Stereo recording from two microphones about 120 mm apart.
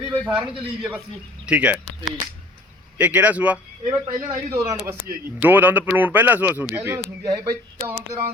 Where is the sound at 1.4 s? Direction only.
10° right (ahead or behind).